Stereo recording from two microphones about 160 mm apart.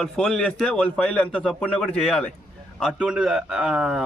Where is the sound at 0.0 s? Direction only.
5° left (ahead or behind).